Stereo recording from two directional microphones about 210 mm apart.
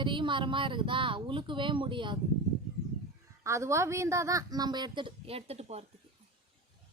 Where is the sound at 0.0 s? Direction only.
20° right (ahead or behind).